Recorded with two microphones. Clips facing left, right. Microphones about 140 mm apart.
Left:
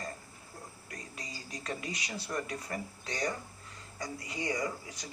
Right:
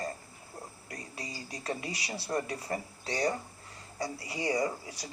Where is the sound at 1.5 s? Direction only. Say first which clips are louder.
Right 2 dB; 35° right (ahead or behind).